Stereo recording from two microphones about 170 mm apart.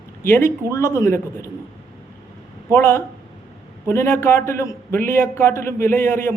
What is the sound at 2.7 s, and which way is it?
A man's voice, 15° left (ahead or behind).